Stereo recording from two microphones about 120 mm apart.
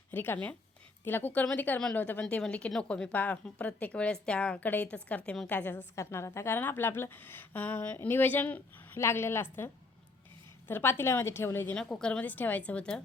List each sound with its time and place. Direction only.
0.1 s a woman's voice: 15° left (ahead or behind)
11.8 s a woman's voice: 5° left (ahead or behind)